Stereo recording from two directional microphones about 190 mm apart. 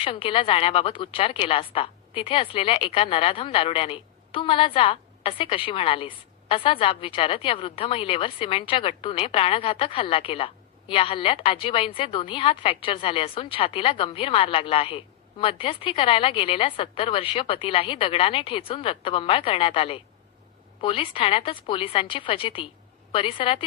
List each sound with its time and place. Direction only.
0.0 s speech: 30° left (ahead or behind)